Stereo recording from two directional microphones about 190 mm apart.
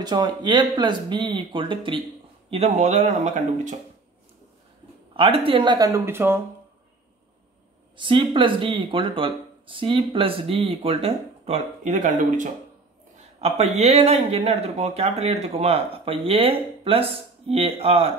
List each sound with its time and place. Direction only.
0.0 s speech: 20° right (ahead or behind); by 3.7 s 40° right (ahead or behind)
5.1 s speech: 30° right (ahead or behind); by 6.4 s 10° right (ahead or behind)
7.9 s speech: 25° right (ahead or behind); by 12.4 s 45° right (ahead or behind)
13.4 s speech: 35° right (ahead or behind)